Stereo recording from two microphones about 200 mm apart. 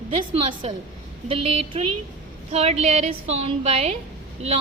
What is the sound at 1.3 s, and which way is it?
A woman's voice, 25° right (ahead or behind).